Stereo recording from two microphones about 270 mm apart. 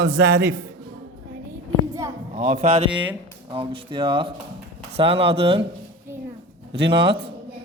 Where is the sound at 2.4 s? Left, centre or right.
Right.